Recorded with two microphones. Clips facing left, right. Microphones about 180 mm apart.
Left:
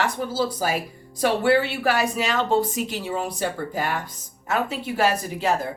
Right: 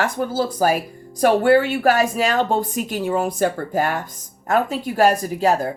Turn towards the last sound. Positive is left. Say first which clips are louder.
# right 5 dB
turn(degrees=-40)  # may be behind; listen again after turning